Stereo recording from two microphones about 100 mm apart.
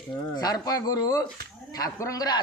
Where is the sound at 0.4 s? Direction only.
40° left (ahead or behind).